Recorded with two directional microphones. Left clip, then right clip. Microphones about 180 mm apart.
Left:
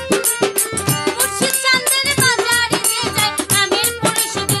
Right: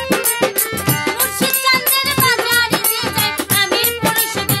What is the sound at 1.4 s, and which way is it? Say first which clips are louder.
Music: right 1 dB; 5° left (ahead or behind).